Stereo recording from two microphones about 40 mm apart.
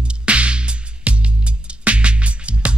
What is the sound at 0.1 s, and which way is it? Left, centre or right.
Music, right.